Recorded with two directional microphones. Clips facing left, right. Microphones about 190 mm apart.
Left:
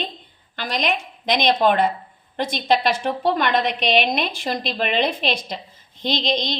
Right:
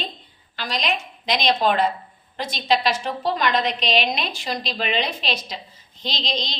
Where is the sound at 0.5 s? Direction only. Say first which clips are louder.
Left 2 dB; 55° left (ahead or behind).